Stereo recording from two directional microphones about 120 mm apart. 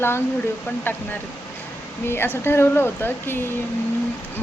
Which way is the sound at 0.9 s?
15° left (ahead or behind).